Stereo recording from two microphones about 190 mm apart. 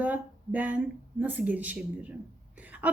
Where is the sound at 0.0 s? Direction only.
10° right (ahead or behind).